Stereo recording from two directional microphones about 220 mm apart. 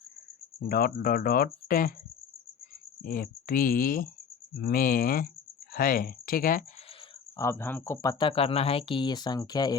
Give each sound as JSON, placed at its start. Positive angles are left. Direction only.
{"t": 0.7, "sound": "speech", "side_deg": 40}
{"t": 3.0, "sound": "speech", "side_deg": 40}
{"t": 7.3, "sound": "speech", "side_deg": 10}